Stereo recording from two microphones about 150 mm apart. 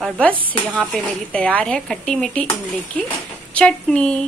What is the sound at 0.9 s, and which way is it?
A woman's voice, 5° left (ahead or behind).